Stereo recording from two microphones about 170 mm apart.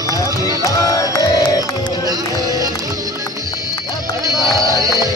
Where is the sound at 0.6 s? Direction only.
20° left (ahead or behind).